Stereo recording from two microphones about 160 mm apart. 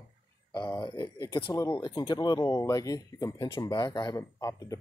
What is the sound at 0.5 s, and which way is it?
Speech, 30° left (ahead or behind).